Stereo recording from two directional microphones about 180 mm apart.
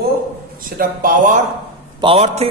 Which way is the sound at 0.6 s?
50° right (ahead or behind).